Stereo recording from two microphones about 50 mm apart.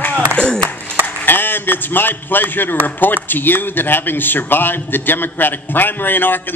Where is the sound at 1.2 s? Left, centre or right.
Left.